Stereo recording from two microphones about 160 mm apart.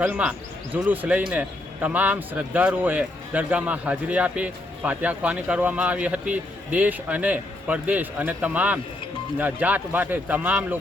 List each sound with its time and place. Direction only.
0.0 s a man's voice: 10° right (ahead or behind)